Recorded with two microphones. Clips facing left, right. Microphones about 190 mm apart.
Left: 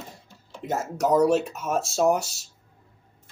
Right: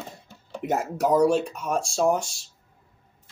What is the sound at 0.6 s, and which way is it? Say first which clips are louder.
Speech: right 2 dB; 15° right (ahead or behind).